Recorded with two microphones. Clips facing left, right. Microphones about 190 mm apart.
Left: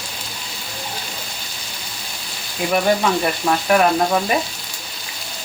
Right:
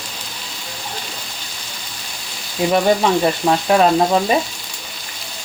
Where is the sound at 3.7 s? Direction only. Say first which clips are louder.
Right 2 dB; 25° right (ahead or behind).